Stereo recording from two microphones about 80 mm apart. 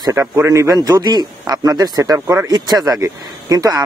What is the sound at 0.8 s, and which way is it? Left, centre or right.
Speech, right.